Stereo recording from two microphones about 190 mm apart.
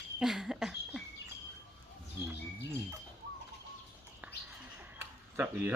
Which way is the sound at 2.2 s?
15° right (ahead or behind).